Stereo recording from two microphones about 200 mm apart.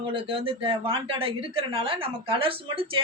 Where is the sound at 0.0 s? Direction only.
25° right (ahead or behind).